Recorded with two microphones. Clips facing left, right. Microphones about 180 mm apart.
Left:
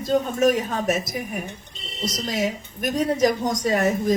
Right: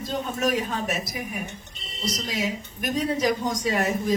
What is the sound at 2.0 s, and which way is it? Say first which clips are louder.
A woman's voice: left 3 dB; 50° left (ahead or behind).